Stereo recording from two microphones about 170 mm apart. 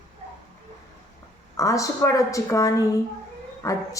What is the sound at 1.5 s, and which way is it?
A woman's voice, 20° left (ahead or behind).